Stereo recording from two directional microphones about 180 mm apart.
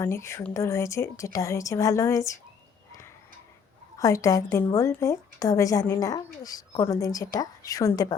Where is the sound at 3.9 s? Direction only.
15° left (ahead or behind).